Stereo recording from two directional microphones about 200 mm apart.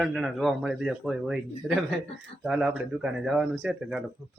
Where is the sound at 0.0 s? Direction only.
Centre (ahead or behind).